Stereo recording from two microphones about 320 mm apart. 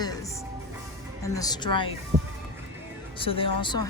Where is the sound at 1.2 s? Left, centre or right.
Centre.